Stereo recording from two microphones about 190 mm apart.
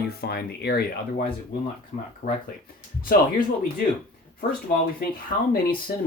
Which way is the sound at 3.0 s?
50° left (ahead or behind).